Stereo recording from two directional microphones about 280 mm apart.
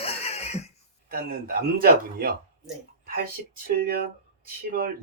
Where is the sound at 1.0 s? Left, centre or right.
Right.